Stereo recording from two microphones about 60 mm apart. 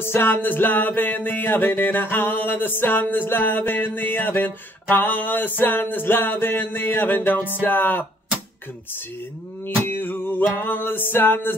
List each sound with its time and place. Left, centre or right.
0.0 s music: left
9.8 s music: left